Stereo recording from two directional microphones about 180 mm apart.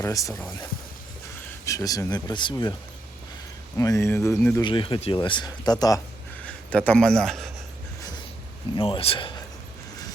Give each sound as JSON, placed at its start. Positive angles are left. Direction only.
{"t": 0.0, "sound": "speech", "side_deg": 15}
{"t": 1.6, "sound": "speech", "side_deg": 20}
{"t": 3.8, "sound": "speech", "side_deg": 15}
{"t": 4.6, "sound": "speech", "side_deg": 30}
{"t": 6.4, "sound": "speech", "side_deg": 5}
{"t": 8.7, "sound": "speech", "side_deg": 30}